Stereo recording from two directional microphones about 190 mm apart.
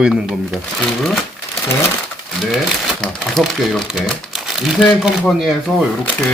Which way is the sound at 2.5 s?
Centre (ahead or behind).